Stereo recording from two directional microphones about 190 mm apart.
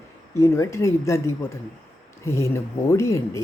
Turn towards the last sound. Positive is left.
turn(degrees=15)  # may be behind; listen again after turning